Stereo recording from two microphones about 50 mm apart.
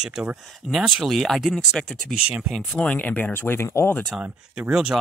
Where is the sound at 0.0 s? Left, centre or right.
Centre.